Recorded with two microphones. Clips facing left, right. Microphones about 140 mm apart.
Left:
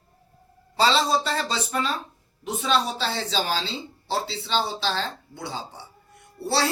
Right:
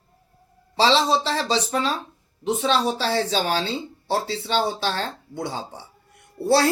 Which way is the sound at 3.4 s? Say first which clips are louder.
Right 4 dB; 50° right (ahead or behind).